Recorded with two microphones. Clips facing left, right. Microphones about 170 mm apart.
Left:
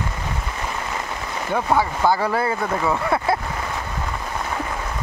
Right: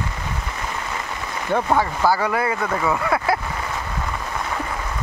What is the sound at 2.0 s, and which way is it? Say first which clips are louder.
Speech: even; 30° left (ahead or behind).